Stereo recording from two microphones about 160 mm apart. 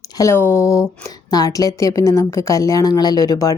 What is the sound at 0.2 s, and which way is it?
Speech, 15° left (ahead or behind).